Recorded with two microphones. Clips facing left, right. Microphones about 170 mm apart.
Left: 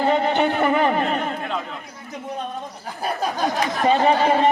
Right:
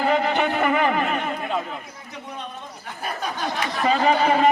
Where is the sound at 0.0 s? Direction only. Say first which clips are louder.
Left 2 dB; 30° left (ahead or behind).